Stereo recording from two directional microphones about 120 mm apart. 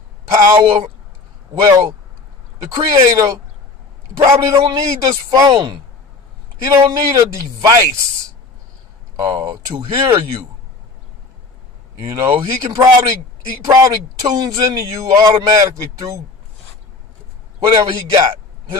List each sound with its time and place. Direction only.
0.3 s a sound: 25° right (ahead or behind)
1.5 s speech: 25° right (ahead or behind)
4.4 s speech: 25° right (ahead or behind)
6.6 s speech: 30° right (ahead or behind)
9.2 s speech: 25° right (ahead or behind)
12.0 s speech: 30° right (ahead or behind)
18.1 s a sound: 25° right (ahead or behind)